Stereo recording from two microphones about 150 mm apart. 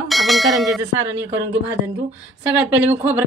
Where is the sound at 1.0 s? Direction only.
20° right (ahead or behind).